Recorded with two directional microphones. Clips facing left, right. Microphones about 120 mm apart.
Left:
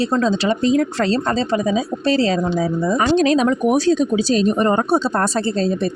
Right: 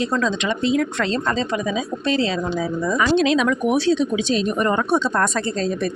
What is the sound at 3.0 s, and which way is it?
A woman's voice, 40° left (ahead or behind).